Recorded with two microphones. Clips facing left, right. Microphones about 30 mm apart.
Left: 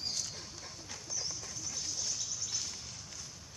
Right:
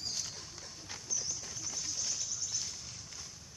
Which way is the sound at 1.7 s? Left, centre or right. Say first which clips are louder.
Even; centre.